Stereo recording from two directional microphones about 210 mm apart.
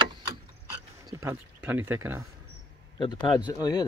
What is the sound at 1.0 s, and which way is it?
Speech, 10° right (ahead or behind).